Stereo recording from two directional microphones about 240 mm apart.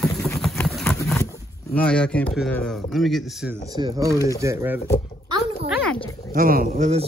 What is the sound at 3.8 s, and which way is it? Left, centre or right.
Speech, centre.